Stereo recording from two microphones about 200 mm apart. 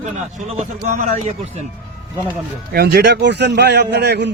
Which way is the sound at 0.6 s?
40° right (ahead or behind).